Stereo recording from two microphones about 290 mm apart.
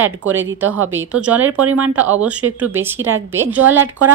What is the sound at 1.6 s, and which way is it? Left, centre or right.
Speech, right.